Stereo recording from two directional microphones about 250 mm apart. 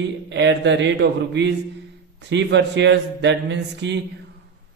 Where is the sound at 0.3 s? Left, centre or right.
Right.